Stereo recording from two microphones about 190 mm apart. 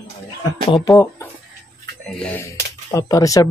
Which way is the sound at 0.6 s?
20° left (ahead or behind).